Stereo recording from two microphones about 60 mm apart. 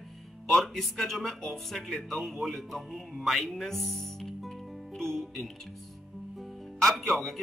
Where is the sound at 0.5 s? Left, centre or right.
Centre.